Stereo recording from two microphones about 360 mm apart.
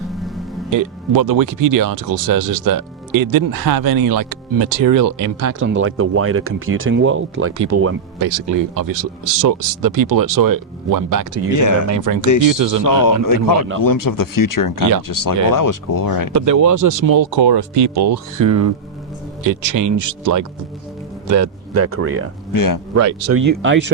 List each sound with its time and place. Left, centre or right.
0.1 s music: centre
0.7 s speech: right
8.2 s speech: right
11.5 s speech: left
11.9 s speech: right
12.2 s speech: left
12.5 s speech: right
12.8 s speech: left
16.3 s speech: right
19.5 s speech: right
22.5 s speech: left
23.0 s speech: right
23.4 s speech: right